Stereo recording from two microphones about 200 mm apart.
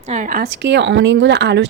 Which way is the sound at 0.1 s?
40° right (ahead or behind).